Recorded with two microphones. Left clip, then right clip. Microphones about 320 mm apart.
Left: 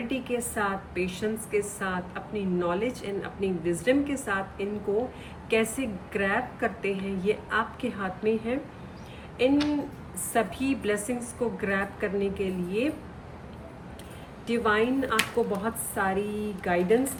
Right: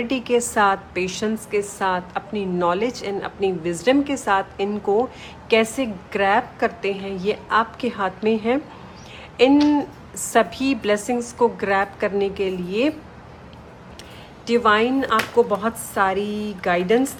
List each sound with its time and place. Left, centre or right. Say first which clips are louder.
0.1 s a woman's voice: right 11 dB; centre
10.3 s a woman's voice: right 8 dB; centre
14.4 s a woman's voice: right 8 dB; centre